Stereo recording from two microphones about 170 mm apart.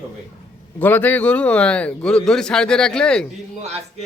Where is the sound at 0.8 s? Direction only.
10° left (ahead or behind).